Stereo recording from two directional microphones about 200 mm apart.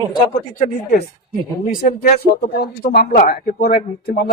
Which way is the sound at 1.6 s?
45° left (ahead or behind).